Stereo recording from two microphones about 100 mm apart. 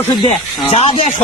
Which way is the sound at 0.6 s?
90° left.